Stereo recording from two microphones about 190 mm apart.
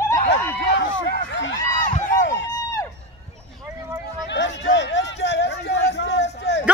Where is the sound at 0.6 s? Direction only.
75° left (ahead or behind).